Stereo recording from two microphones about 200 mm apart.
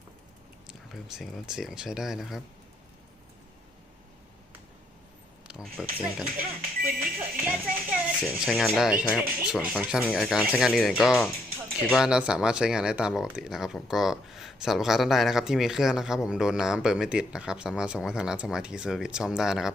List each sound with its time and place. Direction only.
0.7 s speech: centre (ahead or behind)
5.5 s speech: 5° right (ahead or behind)
6.3 s speech: 45° right (ahead or behind)
7.0 s speech: 5° right (ahead or behind)